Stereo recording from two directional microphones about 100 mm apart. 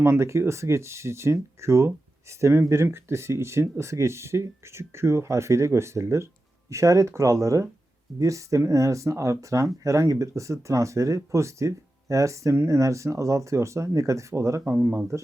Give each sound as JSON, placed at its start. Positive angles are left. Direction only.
{"t": 0.0, "sound": "speech", "side_deg": -25}